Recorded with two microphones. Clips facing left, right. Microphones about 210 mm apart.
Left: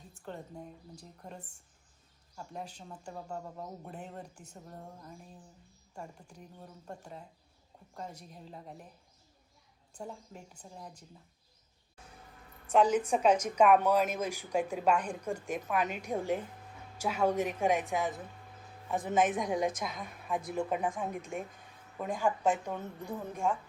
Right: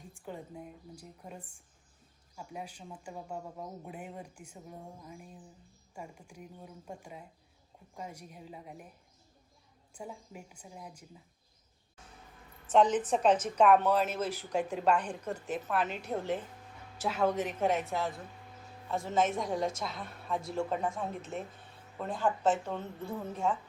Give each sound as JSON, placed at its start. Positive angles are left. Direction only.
{"t": 0.1, "sound": "speech", "side_deg": -10}
{"t": 9.9, "sound": "speech", "side_deg": -10}
{"t": 12.6, "sound": "a woman's voice", "side_deg": 10}